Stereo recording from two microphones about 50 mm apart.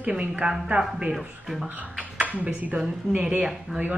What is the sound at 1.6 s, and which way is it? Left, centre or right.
Speech, right.